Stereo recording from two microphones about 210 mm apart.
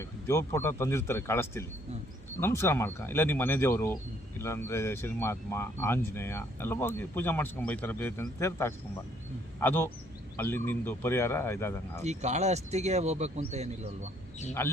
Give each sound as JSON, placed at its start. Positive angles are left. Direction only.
{"t": 0.0, "sound": "speech", "side_deg": 15}
{"t": 12.0, "sound": "speech", "side_deg": -30}
{"t": 14.6, "sound": "speech", "side_deg": 10}